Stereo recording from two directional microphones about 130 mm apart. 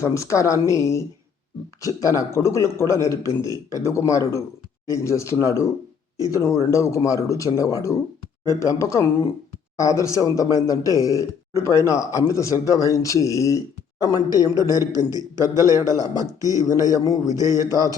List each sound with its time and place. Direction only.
0.0 s a man's voice: 25° left (ahead or behind)
14.6 s a man's voice: 30° left (ahead or behind)
15.5 s a man's voice: 25° right (ahead or behind)
16.9 s a man's voice: 25° left (ahead or behind)
17.2 s a man's voice: 25° right (ahead or behind)